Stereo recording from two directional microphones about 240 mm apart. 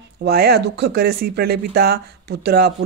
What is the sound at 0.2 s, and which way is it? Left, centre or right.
Speech, right.